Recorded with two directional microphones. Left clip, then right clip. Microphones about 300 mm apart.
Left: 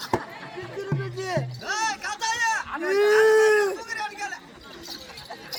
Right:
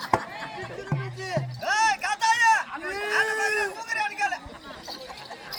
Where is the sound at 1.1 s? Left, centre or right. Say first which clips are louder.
Left 2 dB; centre.